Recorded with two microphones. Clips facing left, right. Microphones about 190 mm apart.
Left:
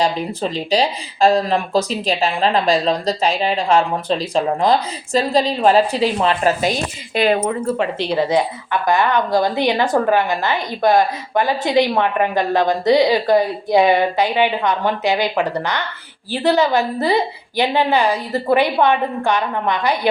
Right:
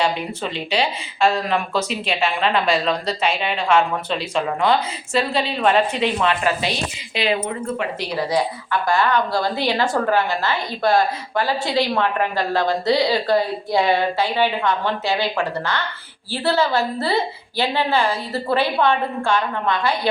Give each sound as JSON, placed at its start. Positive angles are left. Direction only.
{"t": 0.0, "sound": "speech", "side_deg": 35}
{"t": 7.3, "sound": "speech", "side_deg": 70}
{"t": 7.8, "sound": "a woman's voice", "side_deg": 25}